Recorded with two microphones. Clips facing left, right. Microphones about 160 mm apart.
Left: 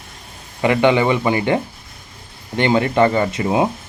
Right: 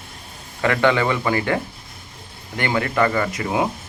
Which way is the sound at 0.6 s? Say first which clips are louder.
Left 4 dB; 20° left (ahead or behind).